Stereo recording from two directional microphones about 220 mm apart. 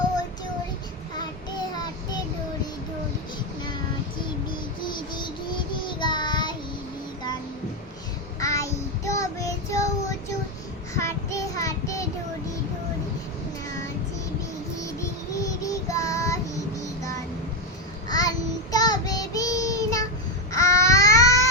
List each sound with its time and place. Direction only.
6.0 s child singing: 20° left (ahead or behind)
8.4 s child singing: 15° left (ahead or behind)
15.3 s child singing: 15° left (ahead or behind)
18.1 s child singing: 15° left (ahead or behind)
20.5 s babbling: 15° left (ahead or behind)